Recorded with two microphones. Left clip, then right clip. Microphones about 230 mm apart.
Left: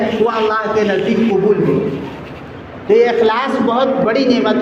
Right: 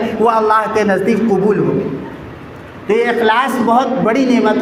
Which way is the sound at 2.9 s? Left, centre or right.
Right.